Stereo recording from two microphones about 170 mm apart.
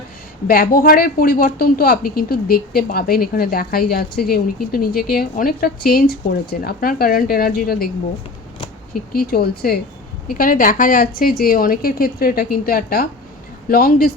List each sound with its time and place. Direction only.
0.4 s a woman's voice: 60° left (ahead or behind)
8.9 s a woman's voice: 60° left (ahead or behind)